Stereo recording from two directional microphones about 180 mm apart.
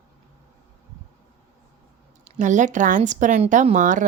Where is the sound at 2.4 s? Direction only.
45° right (ahead or behind).